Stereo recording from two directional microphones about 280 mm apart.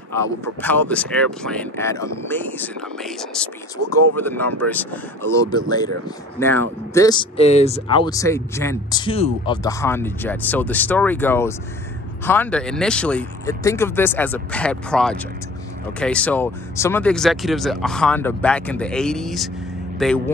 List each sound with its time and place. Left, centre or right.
0.1 s speech: centre
3.8 s speech: right
4.2 s speech: centre